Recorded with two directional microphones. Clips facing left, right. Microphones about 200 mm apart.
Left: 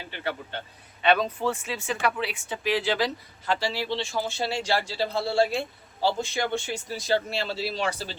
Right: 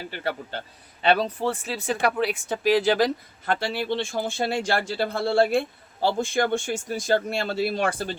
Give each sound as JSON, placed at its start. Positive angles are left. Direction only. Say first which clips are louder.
{"t": 0.1, "sound": "speech", "louder": "even", "side_deg": -40}